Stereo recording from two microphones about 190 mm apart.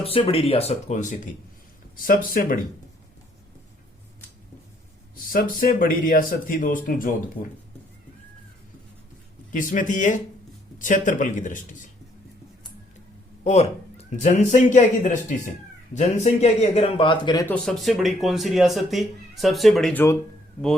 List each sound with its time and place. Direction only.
0.0 s a man's voice: 30° left (ahead or behind); by 2.6 s 45° left (ahead or behind)
5.1 s speech: 45° left (ahead or behind)
9.5 s a man's voice: 45° left (ahead or behind)
13.4 s a man's voice: 35° left (ahead or behind)
17.4 s speech: 5° left (ahead or behind)